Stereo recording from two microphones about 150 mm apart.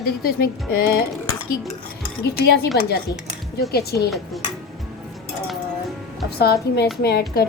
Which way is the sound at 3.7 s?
90° left.